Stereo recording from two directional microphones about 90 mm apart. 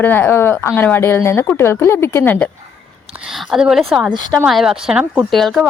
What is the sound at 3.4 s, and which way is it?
A woman's voice, 10° right (ahead or behind).